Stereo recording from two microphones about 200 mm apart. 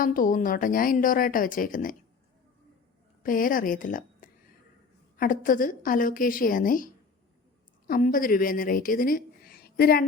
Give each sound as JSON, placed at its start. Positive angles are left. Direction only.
{"t": 0.0, "sound": "a woman's voice", "side_deg": 45}
{"t": 3.2, "sound": "a woman's voice", "side_deg": 45}